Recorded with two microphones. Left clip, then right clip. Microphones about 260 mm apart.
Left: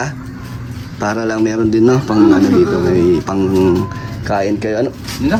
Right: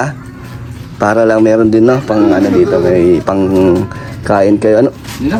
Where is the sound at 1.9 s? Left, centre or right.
Centre.